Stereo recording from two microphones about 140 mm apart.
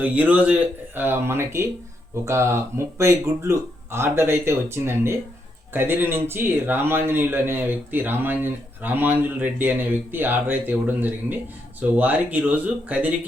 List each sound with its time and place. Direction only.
0.0 s speech: 10° right (ahead or behind)